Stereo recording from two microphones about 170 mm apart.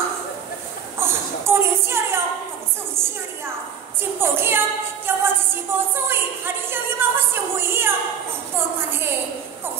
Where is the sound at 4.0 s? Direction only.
15° right (ahead or behind).